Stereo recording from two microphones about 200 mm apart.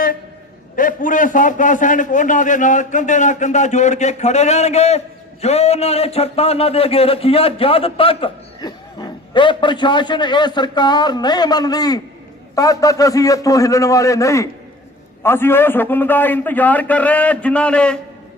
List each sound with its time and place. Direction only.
0.8 s a man's voice: 40° left (ahead or behind); by 18.0 s 5° left (ahead or behind)